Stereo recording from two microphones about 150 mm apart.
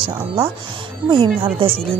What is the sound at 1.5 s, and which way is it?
Speech, 35° right (ahead or behind).